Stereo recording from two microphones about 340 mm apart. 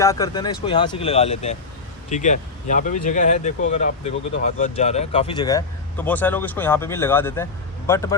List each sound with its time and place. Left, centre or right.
0.0 s speech: centre